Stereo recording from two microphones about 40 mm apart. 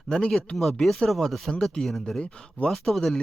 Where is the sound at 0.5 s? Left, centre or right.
Centre.